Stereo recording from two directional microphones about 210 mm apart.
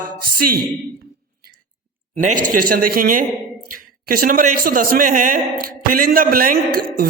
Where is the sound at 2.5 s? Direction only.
40° right (ahead or behind).